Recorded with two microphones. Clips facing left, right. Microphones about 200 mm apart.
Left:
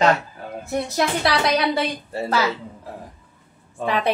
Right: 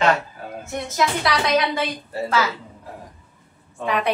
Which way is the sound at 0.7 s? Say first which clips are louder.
Left 1 dB; 35° left (ahead or behind).